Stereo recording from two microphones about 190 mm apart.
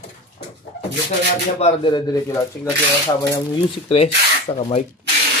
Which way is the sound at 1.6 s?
25° left (ahead or behind).